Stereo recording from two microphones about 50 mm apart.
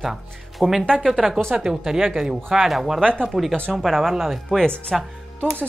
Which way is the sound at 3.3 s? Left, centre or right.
Centre.